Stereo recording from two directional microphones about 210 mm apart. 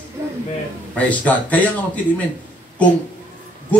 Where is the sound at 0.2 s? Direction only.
15° right (ahead or behind).